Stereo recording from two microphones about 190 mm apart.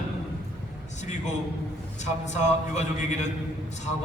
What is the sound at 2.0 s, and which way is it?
A man's voice, 40° left (ahead or behind).